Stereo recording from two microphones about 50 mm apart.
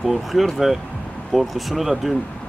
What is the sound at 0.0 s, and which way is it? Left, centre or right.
Speech, centre.